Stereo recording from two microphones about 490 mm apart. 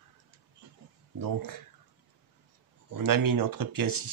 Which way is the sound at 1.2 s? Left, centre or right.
Right.